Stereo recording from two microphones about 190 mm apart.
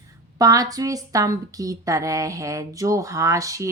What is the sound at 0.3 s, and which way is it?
A woman's voice, 20° right (ahead or behind).